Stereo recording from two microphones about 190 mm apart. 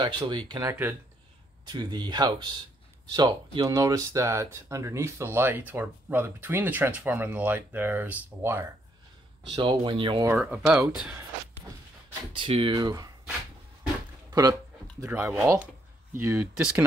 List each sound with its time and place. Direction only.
0.0 s speech: 25° right (ahead or behind)
9.6 s speech: 25° right (ahead or behind)
10.3 s speech: 5° right (ahead or behind)
12.3 s speech: 30° right (ahead or behind)
14.3 s speech: 20° right (ahead or behind)